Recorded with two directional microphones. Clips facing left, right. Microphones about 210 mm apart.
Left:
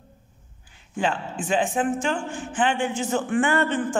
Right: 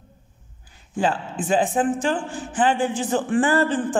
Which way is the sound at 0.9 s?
35° right (ahead or behind).